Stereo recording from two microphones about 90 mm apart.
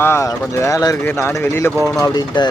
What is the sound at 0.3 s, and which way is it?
Speech, 40° left (ahead or behind).